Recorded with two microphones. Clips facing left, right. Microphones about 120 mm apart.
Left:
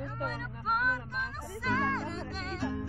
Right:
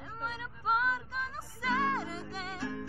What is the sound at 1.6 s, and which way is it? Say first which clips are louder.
Music: even; 10° right (ahead or behind).